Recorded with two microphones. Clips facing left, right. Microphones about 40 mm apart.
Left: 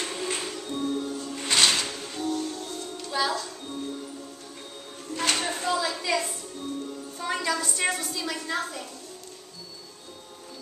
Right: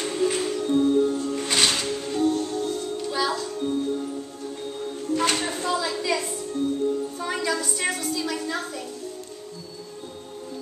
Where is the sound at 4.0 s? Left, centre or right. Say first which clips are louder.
Right 8 dB; right.